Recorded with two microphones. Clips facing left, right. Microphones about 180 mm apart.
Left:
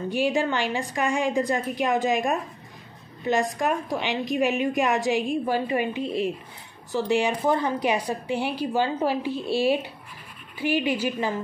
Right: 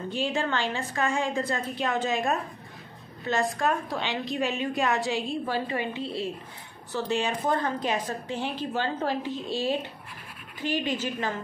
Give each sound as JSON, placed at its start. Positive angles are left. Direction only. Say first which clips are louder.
{"t": 0.1, "sound": "a woman's voice", "louder": "left 4 dB", "side_deg": 15}